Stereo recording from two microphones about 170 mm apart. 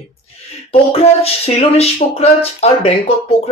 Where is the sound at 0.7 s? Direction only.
35° left (ahead or behind).